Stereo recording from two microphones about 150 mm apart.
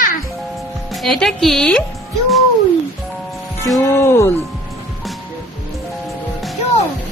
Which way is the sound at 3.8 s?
20° left (ahead or behind).